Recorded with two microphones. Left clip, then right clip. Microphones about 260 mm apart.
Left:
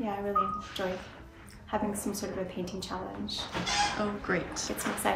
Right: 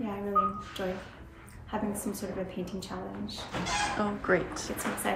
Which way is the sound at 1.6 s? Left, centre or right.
Centre.